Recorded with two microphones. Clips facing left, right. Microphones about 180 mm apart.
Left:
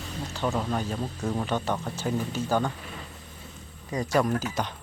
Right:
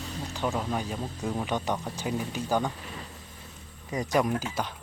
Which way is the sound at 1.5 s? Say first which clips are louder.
Left 1 dB; 15° right (ahead or behind).